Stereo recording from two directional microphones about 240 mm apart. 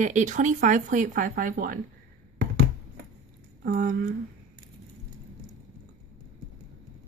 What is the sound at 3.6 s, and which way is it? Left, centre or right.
Speech, right.